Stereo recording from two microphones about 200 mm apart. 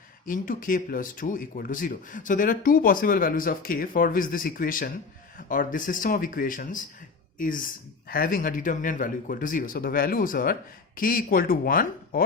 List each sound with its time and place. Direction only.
0.3 s speech: 45° left (ahead or behind)